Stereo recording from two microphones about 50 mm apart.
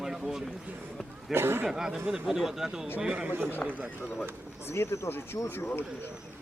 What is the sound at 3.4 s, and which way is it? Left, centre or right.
Speech, left.